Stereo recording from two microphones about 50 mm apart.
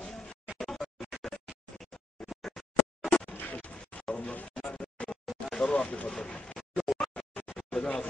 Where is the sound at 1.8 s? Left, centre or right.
Centre.